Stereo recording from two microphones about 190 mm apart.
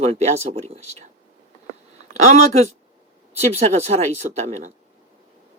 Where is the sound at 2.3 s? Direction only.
35° right (ahead or behind).